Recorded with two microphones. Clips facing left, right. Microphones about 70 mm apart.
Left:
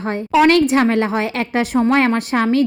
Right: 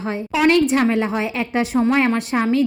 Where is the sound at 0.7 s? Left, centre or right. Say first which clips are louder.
Left 2 dB; left.